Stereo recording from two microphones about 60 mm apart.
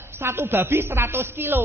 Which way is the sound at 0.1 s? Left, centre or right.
Right.